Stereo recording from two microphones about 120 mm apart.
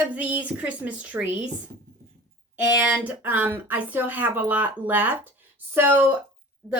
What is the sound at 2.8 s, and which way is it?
Speech, 10° right (ahead or behind).